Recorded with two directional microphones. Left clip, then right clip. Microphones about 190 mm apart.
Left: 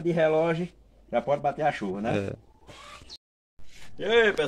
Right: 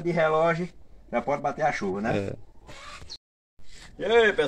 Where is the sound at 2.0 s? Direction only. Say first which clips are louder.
Left 1 dB; 5° left (ahead or behind).